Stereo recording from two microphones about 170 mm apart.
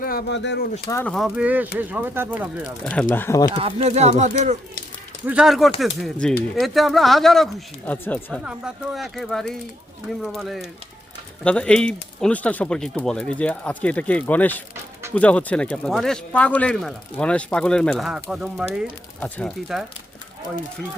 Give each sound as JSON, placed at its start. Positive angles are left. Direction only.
{"t": 0.0, "sound": "speech", "side_deg": 60}
{"t": 0.9, "sound": "speech", "side_deg": 15}
{"t": 1.1, "sound": "speech", "side_deg": -5}
{"t": 2.8, "sound": "speech", "side_deg": 10}
{"t": 3.5, "sound": "speech", "side_deg": -35}
{"t": 5.2, "sound": "speech", "side_deg": -5}
{"t": 8.4, "sound": "speech", "side_deg": -5}